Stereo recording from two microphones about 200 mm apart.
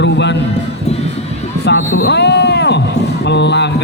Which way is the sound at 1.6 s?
60° left (ahead or behind).